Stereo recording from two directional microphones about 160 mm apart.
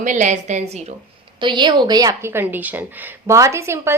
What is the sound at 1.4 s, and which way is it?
A woman's voice, 30° right (ahead or behind).